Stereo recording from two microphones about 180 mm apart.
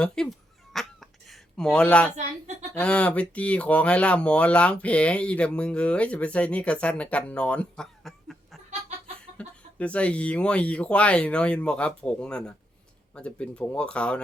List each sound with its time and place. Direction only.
0.0 s a sound: centre (ahead or behind)
1.3 s speech: 5° left (ahead or behind)
9.7 s speech: 5° left (ahead or behind)